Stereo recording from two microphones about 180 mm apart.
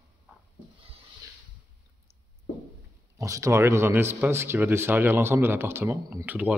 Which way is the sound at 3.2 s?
15° right (ahead or behind).